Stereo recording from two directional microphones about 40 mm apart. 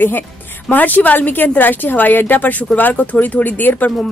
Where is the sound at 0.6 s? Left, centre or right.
Left.